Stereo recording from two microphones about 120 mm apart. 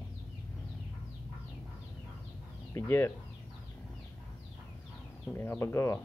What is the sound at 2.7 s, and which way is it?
Speech, 20° left (ahead or behind).